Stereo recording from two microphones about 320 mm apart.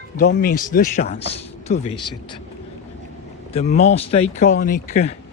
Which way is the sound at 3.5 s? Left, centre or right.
Left.